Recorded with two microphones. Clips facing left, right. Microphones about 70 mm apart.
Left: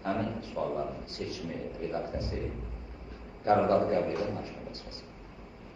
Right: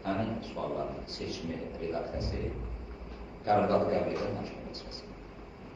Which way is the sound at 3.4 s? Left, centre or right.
Left.